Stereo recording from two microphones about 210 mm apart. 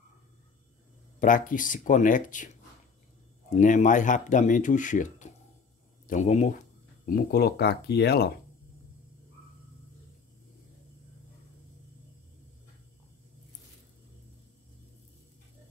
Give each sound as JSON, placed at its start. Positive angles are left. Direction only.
{"t": 1.2, "sound": "speech", "side_deg": 40}
{"t": 7.1, "sound": "speech", "side_deg": 45}